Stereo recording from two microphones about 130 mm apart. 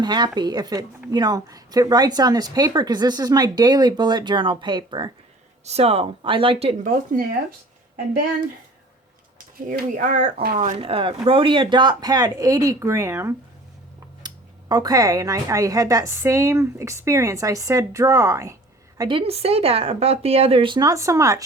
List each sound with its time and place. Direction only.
0.0 s a woman's voice: 35° right (ahead or behind)
5.6 s speech: 50° right (ahead or behind)
6.8 s speech: 90° right
9.6 s speech: 80° right
10.8 s speech: 45° right (ahead or behind); by 13.3 s 20° right (ahead or behind)
14.2 s speech: 30° right (ahead or behind)
18.9 s speech: 40° right (ahead or behind)